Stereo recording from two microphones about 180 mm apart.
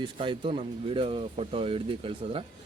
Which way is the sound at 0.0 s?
25° right (ahead or behind).